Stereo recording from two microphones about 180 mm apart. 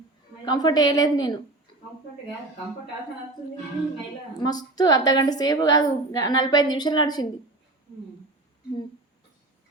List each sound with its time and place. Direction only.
0.4 s a woman's voice: 25° left (ahead or behind)
4.4 s a woman's voice: 20° left (ahead or behind)